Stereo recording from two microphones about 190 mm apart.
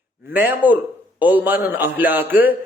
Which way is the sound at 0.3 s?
10° right (ahead or behind).